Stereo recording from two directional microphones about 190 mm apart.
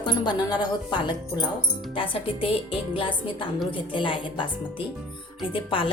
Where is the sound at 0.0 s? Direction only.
25° left (ahead or behind).